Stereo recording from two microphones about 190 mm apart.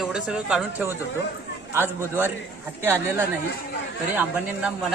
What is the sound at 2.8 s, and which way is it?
Speech, 10° right (ahead or behind).